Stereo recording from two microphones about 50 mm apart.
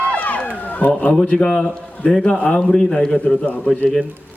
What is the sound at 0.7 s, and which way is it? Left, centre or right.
Speech, left.